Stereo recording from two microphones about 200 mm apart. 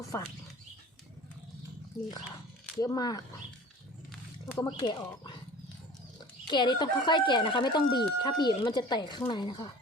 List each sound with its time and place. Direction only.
0.1 s speech: 15° left (ahead or behind)
2.7 s speech: 20° left (ahead or behind)
4.5 s speech: 20° left (ahead or behind)
6.5 s speech: 20° left (ahead or behind)